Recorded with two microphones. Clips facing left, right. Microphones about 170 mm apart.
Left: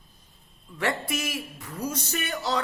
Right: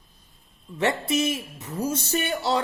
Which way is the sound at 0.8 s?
25° right (ahead or behind).